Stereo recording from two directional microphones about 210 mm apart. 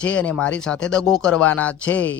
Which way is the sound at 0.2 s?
5° left (ahead or behind).